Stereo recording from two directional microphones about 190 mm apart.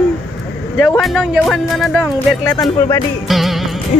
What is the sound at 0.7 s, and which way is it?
Speech, centre (ahead or behind).